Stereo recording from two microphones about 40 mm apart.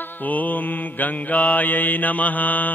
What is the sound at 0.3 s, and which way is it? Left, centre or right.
Mantra, left.